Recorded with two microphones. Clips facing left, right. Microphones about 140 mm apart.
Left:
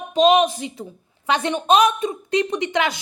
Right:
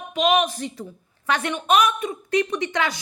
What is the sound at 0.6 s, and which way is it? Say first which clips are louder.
A woman's voice: even; 20° left (ahead or behind).